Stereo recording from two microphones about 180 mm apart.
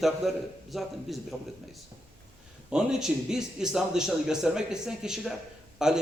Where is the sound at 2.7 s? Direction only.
5° right (ahead or behind).